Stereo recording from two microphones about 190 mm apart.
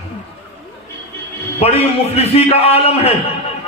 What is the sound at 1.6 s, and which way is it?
A man's voice, 30° left (ahead or behind).